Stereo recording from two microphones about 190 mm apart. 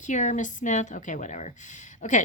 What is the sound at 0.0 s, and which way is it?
A woman's voice, 40° left (ahead or behind).